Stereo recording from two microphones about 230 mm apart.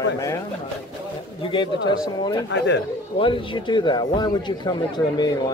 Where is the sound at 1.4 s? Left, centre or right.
Left.